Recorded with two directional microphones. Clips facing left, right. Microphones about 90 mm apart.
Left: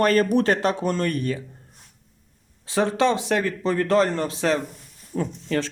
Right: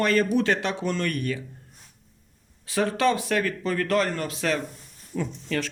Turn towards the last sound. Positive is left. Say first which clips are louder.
# left 3 dB
turn(degrees=30)  # may be behind; listen again after turning